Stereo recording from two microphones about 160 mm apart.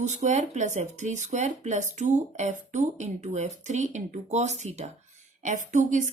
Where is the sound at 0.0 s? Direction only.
45° right (ahead or behind).